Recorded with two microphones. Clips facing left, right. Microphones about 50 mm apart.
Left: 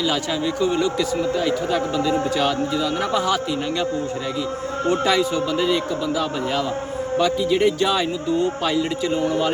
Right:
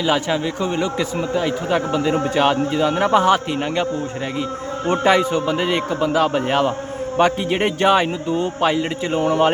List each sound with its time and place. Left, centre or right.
0.6 s a man's voice: right
4.9 s a man's voice: right
9.2 s a man's voice: right